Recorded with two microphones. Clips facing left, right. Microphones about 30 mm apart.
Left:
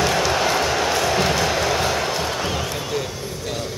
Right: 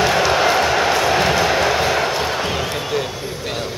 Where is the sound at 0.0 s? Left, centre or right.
Centre.